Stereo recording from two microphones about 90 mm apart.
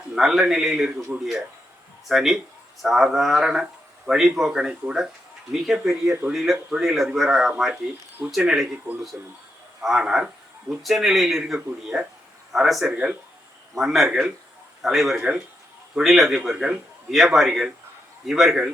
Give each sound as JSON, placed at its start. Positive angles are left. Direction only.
{"t": 0.2, "sound": "speech", "side_deg": -5}
{"t": 9.8, "sound": "speech", "side_deg": -5}